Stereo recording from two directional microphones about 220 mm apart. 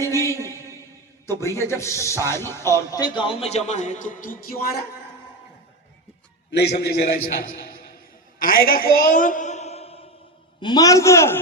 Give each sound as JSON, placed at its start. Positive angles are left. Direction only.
{"t": 0.0, "sound": "a sound", "side_deg": 15}
{"t": 1.3, "sound": "speech", "side_deg": 10}
{"t": 6.5, "sound": "a man's voice", "side_deg": 50}